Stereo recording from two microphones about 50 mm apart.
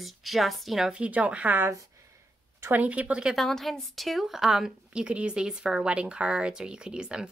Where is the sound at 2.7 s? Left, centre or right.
Right.